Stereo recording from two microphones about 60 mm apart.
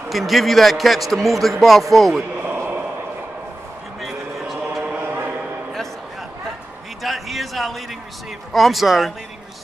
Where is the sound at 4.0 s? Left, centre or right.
Centre.